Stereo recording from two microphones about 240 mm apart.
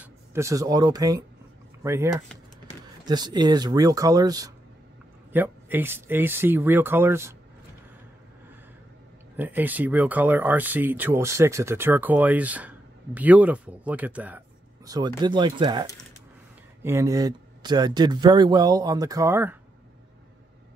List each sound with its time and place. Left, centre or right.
0.0 s speech: centre
9.4 s speech: centre
14.9 s speech: centre